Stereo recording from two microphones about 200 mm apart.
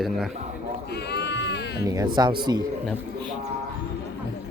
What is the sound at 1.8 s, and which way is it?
Speech, 20° right (ahead or behind).